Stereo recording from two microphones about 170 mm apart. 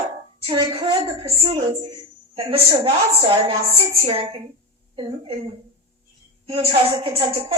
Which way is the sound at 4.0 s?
35° right (ahead or behind).